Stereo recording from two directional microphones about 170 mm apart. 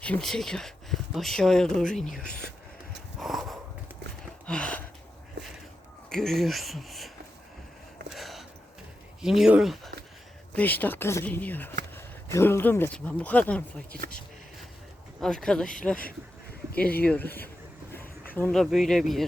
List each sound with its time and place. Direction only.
0.0 s speech: 5° left (ahead or behind)
3.2 s sniff: centre (ahead or behind)
4.4 s gasp: 5° left (ahead or behind)
5.4 s a sound: 90° right
6.1 s speech: centre (ahead or behind)
8.1 s a sound: centre (ahead or behind)
9.2 s speech: 5° right (ahead or behind)
10.5 s speech: 10° left (ahead or behind)
15.2 s speech: 5° left (ahead or behind)
16.0 s a sound: 55° left (ahead or behind)
17.1 s speech: 10° left (ahead or behind)